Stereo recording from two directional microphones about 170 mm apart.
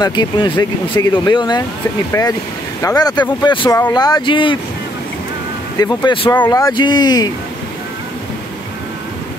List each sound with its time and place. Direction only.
0.0 s speech: 25° left (ahead or behind)
5.8 s speech: 25° left (ahead or behind)